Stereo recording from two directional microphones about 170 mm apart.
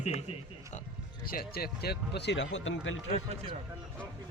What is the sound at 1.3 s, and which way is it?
Speech, 60° left (ahead or behind).